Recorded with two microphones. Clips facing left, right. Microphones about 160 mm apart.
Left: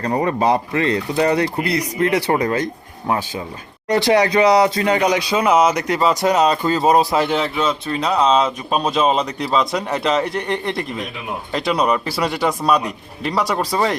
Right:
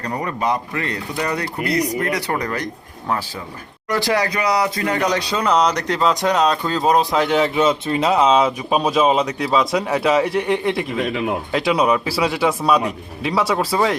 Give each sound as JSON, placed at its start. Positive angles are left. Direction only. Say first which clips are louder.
{"t": 0.0, "sound": "speech", "louder": "left 5 dB", "side_deg": 30}
{"t": 7.5, "sound": "speech", "louder": "right 3 dB", "side_deg": -20}
{"t": 8.0, "sound": "speech", "louder": "right 1 dB", "side_deg": -5}